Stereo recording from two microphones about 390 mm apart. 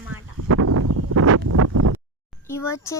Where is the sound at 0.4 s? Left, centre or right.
Right.